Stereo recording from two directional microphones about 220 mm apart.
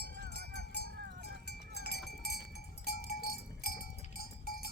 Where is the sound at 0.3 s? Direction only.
50° left (ahead or behind).